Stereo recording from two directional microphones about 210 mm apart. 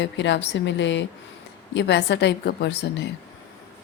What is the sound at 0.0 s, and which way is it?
A woman's voice, 55° left (ahead or behind).